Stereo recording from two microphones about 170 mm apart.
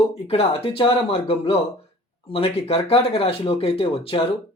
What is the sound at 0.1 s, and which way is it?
Speech, 35° left (ahead or behind).